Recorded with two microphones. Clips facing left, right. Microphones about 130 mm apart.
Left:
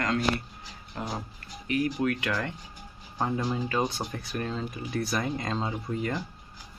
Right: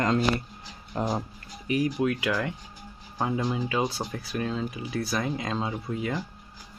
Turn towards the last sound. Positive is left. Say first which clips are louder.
# right 1 dB
turn(degrees=0)  # may be behind; listen again after turning